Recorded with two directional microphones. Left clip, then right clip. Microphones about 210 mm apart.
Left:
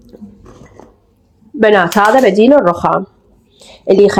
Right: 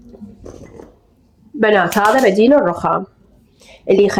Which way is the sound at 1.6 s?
20° left (ahead or behind).